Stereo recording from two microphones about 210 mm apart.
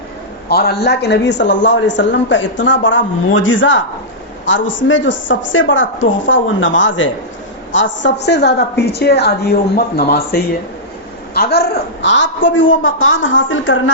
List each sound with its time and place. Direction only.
0.4 s a man's voice: 50° left (ahead or behind)
12.0 s a man's voice: 60° left (ahead or behind)